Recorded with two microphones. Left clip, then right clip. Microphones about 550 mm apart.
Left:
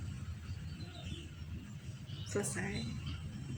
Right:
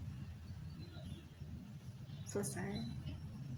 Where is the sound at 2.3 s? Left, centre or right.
Right.